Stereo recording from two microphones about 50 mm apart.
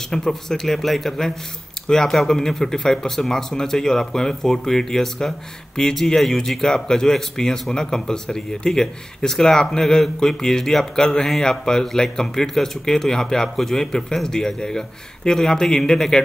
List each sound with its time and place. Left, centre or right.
0.1 s speech: centre